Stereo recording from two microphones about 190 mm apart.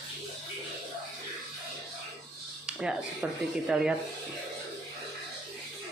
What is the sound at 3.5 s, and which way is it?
Speech, 5° right (ahead or behind).